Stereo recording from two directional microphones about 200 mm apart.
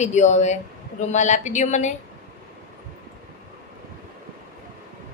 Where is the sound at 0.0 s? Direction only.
35° left (ahead or behind).